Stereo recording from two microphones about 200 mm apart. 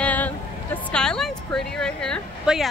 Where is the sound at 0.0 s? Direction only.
10° left (ahead or behind).